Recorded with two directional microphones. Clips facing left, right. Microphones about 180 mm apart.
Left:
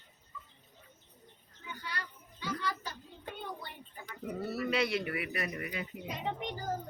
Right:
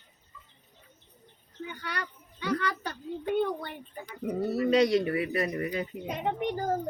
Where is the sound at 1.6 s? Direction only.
65° right (ahead or behind).